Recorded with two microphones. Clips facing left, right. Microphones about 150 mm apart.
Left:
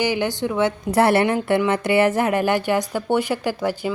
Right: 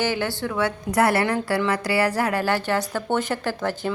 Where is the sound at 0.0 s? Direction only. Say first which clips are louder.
Left 3 dB; 15° left (ahead or behind).